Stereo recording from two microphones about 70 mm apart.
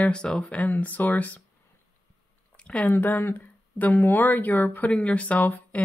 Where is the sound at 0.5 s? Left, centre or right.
Left.